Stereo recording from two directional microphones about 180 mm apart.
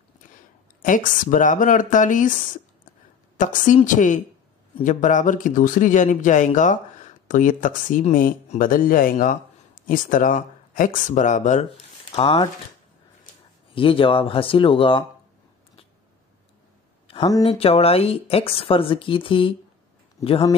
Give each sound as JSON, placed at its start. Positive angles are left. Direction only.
{"t": 0.8, "sound": "speech", "side_deg": 45}
{"t": 3.3, "sound": "speech", "side_deg": 45}
{"t": 12.1, "sound": "speech", "side_deg": 30}
{"t": 13.7, "sound": "speech", "side_deg": 30}
{"t": 17.4, "sound": "speech", "side_deg": 35}